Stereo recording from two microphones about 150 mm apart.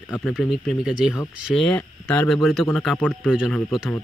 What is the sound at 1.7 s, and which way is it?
Speech, 15° left (ahead or behind).